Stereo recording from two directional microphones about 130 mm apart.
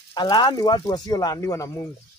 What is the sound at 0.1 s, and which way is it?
Speech, 35° left (ahead or behind).